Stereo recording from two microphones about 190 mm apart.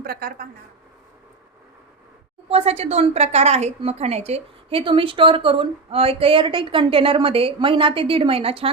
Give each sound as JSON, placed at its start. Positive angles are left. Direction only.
{"t": 0.0, "sound": "a woman's voice", "side_deg": -55}
{"t": 2.5, "sound": "a woman's voice", "side_deg": -35}